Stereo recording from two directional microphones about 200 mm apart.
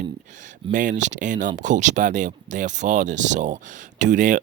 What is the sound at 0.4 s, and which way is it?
Speech, 40° right (ahead or behind).